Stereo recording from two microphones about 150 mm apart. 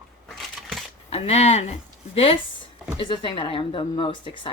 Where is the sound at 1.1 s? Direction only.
45° left (ahead or behind).